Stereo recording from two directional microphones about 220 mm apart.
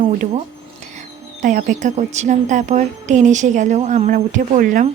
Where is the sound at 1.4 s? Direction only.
35° right (ahead or behind).